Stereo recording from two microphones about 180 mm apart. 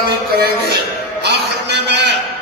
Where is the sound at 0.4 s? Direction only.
65° right (ahead or behind).